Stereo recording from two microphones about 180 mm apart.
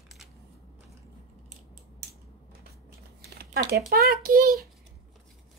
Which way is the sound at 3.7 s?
60° right (ahead or behind).